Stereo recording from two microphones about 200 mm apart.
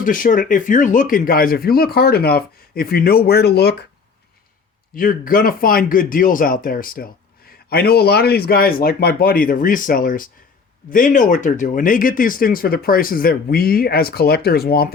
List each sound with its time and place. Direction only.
0.0 s speech: 40° left (ahead or behind)
4.9 s speech: 45° left (ahead or behind)